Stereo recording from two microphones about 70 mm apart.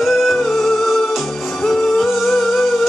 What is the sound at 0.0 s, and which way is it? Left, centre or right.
Music, centre.